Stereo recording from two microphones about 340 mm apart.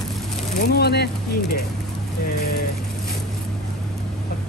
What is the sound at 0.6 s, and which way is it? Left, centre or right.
Speech, left.